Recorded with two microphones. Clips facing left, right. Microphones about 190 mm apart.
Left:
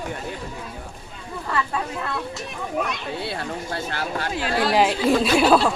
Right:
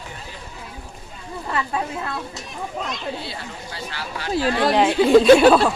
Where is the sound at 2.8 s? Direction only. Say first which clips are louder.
Left 1 dB; 60° left (ahead or behind).